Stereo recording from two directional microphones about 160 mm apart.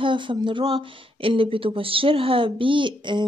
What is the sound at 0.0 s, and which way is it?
Speech, 30° right (ahead or behind).